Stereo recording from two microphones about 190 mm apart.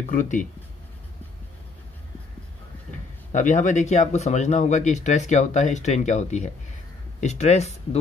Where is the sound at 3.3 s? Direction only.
40° left (ahead or behind).